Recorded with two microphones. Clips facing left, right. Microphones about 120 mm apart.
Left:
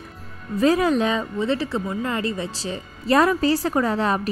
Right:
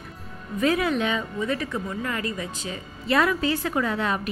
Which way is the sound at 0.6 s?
35° left (ahead or behind).